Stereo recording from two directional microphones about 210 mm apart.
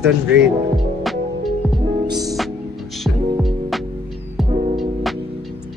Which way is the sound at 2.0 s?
20° right (ahead or behind).